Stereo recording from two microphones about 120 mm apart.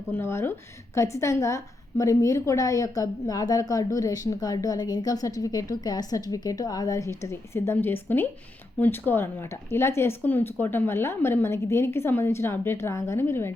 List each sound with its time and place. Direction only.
0.1 s a woman's voice: 20° left (ahead or behind)